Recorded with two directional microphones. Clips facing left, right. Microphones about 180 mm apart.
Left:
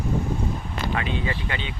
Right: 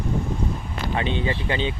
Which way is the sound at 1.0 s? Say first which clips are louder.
Right 6 dB; 30° right (ahead or behind).